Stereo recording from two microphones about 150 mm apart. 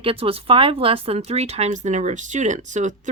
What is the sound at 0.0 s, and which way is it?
Speech, 40° right (ahead or behind).